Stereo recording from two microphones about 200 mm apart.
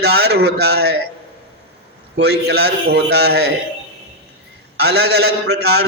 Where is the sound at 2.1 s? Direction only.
60° right (ahead or behind).